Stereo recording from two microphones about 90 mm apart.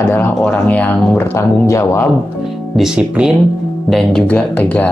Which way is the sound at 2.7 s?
5° right (ahead or behind).